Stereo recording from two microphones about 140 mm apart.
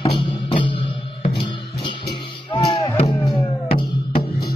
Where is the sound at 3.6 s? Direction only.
45° left (ahead or behind).